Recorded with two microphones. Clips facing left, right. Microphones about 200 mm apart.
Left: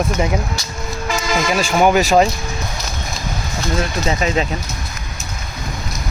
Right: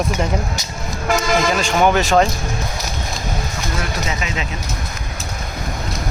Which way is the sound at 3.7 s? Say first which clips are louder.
Left 6 dB; 35° left (ahead or behind).